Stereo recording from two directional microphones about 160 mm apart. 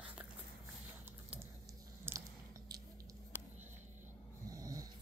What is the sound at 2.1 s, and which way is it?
Biting, 15° right (ahead or behind).